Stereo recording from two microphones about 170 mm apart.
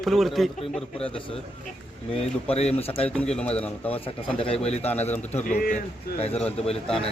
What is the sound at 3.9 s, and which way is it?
Speech, 35° left (ahead or behind).